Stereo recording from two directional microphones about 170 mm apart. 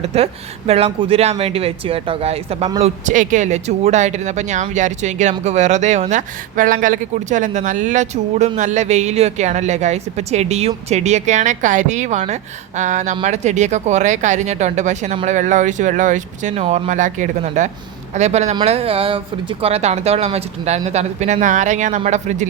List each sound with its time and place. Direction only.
0.1 s speech: 40° right (ahead or behind)